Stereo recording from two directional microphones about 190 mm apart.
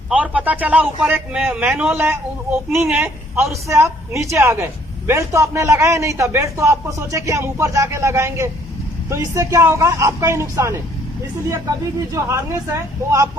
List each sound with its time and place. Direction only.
0.1 s speech: 5° right (ahead or behind)
12.1 s speech: 15° right (ahead or behind)